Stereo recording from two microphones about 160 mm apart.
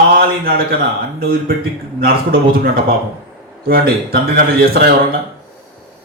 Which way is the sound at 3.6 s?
70° right (ahead or behind).